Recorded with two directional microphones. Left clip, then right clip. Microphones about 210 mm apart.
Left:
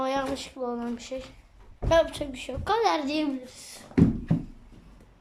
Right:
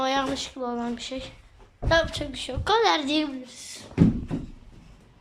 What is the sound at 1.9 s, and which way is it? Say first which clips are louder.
A woman's voice: even; 15° left (ahead or behind).